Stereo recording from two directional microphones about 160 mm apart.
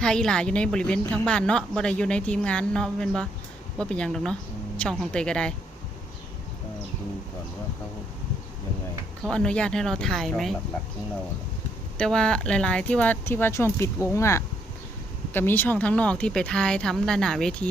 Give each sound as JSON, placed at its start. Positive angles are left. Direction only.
{"t": 0.0, "sound": "a woman's voice", "side_deg": 5}
{"t": 9.2, "sound": "a woman's voice", "side_deg": 5}
{"t": 11.9, "sound": "speech", "side_deg": 5}